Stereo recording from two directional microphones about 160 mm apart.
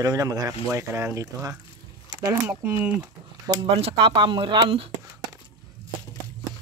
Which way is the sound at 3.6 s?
40° right (ahead or behind).